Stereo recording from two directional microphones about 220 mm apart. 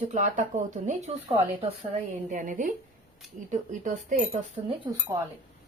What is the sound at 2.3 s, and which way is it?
Speech, 35° right (ahead or behind).